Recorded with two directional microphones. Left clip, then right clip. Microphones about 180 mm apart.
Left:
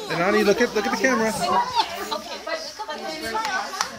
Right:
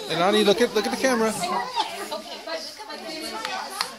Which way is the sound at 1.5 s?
5° right (ahead or behind).